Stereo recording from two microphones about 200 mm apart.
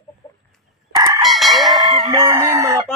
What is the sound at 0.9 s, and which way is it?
Chicken, 20° right (ahead or behind).